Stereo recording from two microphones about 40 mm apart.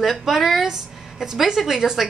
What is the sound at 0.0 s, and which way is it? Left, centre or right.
A woman's voice, centre.